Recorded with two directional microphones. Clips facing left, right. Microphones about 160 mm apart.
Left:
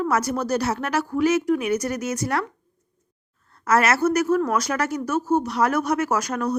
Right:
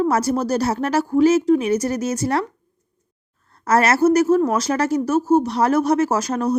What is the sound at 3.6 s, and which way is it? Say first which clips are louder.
A woman's voice: right 4 dB; 35° right (ahead or behind).